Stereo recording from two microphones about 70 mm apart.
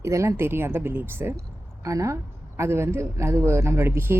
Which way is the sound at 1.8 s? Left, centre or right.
Right.